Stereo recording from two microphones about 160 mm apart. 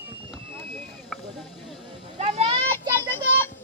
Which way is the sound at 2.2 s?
40° right (ahead or behind).